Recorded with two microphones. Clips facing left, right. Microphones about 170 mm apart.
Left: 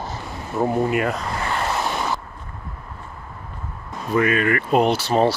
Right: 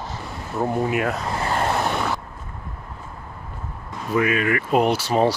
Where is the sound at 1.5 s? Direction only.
55° right (ahead or behind).